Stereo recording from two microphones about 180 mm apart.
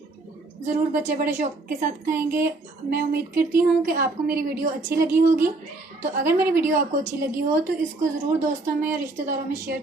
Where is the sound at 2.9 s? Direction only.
55° right (ahead or behind).